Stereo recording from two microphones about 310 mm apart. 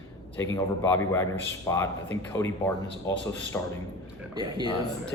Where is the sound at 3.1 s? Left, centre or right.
Centre.